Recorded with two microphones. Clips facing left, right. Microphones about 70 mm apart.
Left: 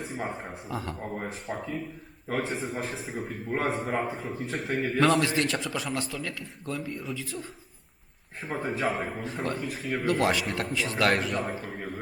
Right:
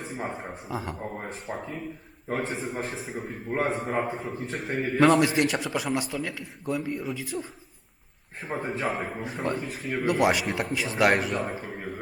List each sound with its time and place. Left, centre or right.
0.1 s a man's voice: centre
8.4 s a man's voice: centre
10.1 s speech: centre
11.3 s a man's voice: centre